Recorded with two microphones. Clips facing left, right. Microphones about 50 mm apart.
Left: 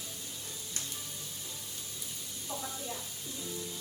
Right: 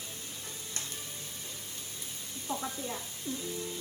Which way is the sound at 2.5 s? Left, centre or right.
Right.